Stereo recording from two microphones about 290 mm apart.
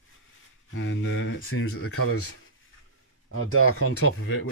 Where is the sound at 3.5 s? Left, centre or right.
Left.